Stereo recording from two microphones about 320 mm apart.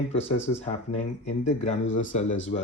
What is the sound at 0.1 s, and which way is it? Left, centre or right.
Speech, centre.